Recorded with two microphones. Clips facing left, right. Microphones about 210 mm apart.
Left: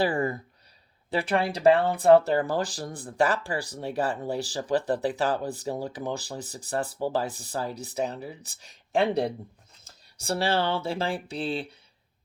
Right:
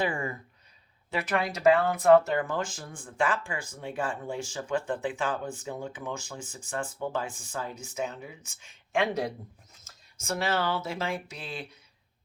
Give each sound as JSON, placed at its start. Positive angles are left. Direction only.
{"t": 0.0, "sound": "speech", "side_deg": 35}